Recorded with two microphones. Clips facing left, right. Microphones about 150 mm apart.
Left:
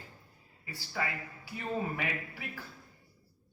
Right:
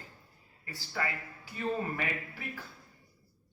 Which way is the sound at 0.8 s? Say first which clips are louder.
Even; 10° left (ahead or behind).